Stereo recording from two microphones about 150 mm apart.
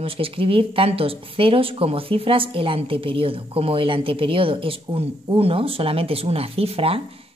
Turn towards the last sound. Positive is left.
turn(degrees=-40)  # may be behind; listen again after turning